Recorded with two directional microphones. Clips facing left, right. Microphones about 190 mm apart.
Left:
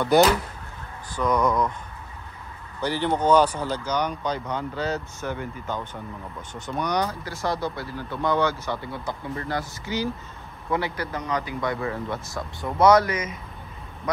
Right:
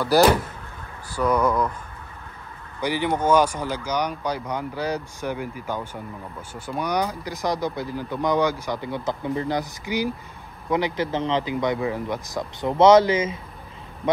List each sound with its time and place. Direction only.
1.1 s speech: 5° right (ahead or behind)
2.8 s speech: 10° right (ahead or behind)